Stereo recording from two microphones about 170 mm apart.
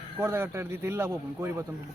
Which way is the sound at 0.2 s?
15° right (ahead or behind).